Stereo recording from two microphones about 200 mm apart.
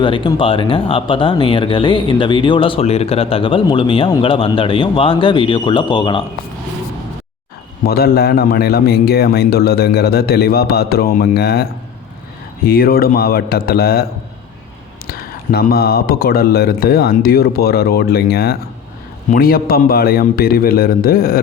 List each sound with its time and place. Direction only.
0.0 s speech: 25° left (ahead or behind)
7.9 s a man's voice: 50° left (ahead or behind)
15.0 s a man's voice: 50° left (ahead or behind)